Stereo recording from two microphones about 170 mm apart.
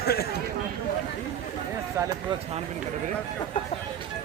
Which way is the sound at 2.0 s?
15° right (ahead or behind).